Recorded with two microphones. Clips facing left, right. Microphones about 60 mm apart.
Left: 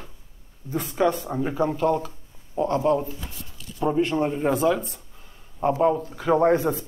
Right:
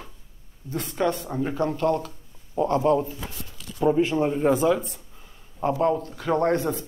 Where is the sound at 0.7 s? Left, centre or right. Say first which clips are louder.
Left 3 dB; centre.